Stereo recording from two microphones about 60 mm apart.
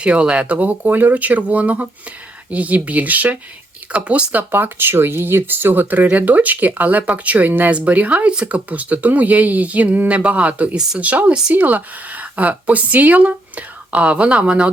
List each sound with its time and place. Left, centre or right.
0.0 s a woman's voice: centre